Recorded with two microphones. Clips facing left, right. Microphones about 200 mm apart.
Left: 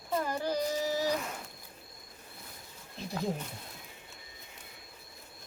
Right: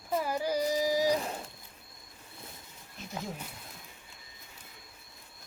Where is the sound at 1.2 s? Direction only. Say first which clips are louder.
Right 3 dB; 30° right (ahead or behind).